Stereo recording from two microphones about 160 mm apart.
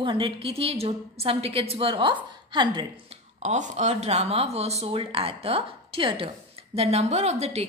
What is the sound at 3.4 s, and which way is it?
Speech, 45° right (ahead or behind).